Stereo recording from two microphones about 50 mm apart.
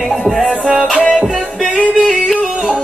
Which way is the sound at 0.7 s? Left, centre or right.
Centre.